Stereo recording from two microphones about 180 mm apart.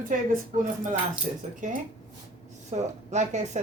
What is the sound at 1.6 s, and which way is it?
Speech, 45° right (ahead or behind).